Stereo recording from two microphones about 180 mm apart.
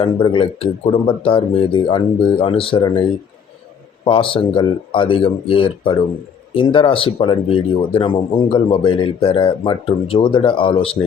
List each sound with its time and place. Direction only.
0.0 s speech: 30° left (ahead or behind)
4.0 s speech: 30° left (ahead or behind)